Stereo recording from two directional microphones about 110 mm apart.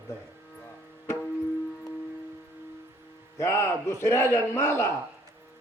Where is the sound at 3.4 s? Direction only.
25° left (ahead or behind).